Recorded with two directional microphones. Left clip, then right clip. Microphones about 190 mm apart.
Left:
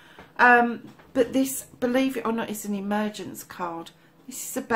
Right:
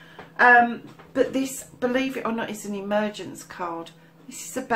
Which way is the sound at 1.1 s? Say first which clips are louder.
Even; 45° left (ahead or behind).